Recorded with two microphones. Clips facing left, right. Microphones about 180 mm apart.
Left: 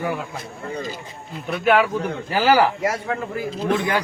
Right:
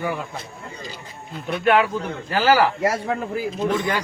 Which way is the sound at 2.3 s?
15° left (ahead or behind).